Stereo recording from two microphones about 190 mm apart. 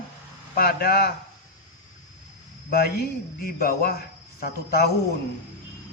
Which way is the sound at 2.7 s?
55° left (ahead or behind).